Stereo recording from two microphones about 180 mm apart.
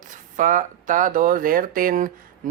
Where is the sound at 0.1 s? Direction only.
45° right (ahead or behind).